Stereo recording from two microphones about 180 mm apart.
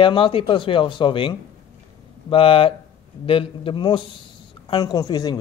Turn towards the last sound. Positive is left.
turn(degrees=20)  # may be behind; listen again after turning